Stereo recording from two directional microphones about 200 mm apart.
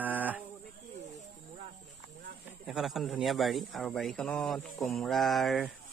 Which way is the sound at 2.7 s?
Centre (ahead or behind).